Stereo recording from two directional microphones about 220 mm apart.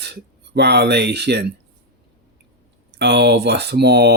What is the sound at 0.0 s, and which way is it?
Speech, 50° right (ahead or behind).